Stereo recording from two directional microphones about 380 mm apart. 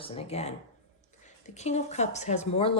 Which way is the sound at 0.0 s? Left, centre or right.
Centre.